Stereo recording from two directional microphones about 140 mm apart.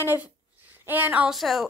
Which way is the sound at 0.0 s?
15° right (ahead or behind).